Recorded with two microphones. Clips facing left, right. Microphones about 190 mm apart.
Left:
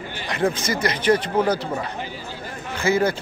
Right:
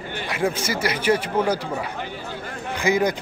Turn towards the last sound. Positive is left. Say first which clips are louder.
# even
turn(degrees=-15)  # may be behind; listen again after turning